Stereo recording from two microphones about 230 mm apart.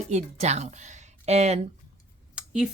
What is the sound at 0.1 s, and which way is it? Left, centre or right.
A woman's voice, right.